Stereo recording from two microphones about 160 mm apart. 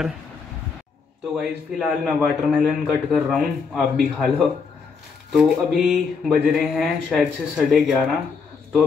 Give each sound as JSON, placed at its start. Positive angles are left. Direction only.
{"t": 1.3, "sound": "speech", "side_deg": -5}